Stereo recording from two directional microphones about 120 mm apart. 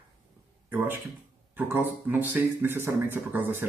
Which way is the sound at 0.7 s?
15° right (ahead or behind).